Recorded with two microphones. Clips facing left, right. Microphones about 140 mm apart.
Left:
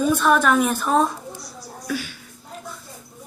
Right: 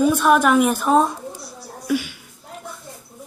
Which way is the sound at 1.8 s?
10° right (ahead or behind).